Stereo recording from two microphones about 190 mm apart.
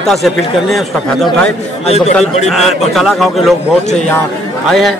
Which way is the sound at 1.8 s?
35° left (ahead or behind).